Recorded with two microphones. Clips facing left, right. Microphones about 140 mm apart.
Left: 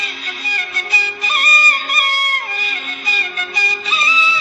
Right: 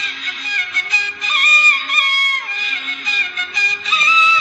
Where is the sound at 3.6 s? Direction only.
30° left (ahead or behind).